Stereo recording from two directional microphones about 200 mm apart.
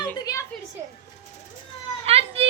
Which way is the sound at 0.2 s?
15° left (ahead or behind).